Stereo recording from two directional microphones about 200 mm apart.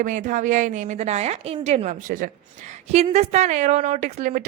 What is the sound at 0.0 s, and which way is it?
A woman's voice, 40° right (ahead or behind).